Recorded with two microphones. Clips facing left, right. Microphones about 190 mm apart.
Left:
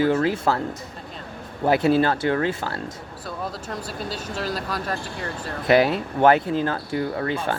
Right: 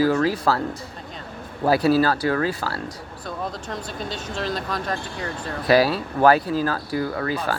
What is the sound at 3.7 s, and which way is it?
Speech, 5° left (ahead or behind).